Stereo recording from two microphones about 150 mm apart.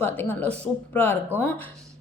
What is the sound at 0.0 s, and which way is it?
A woman's voice, 15° left (ahead or behind).